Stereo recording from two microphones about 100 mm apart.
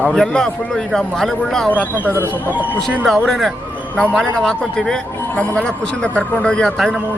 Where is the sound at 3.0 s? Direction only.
5° left (ahead or behind).